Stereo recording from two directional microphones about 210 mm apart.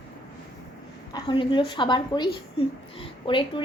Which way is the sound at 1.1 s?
25° left (ahead or behind).